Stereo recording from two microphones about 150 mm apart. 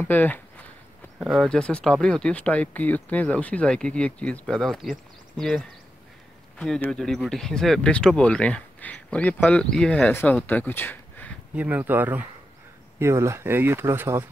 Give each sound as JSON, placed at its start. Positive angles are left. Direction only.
{"t": 0.0, "sound": "speech", "side_deg": 10}
{"t": 1.2, "sound": "speech", "side_deg": 0}
{"t": 6.6, "sound": "speech", "side_deg": 5}
{"t": 11.5, "sound": "speech", "side_deg": -10}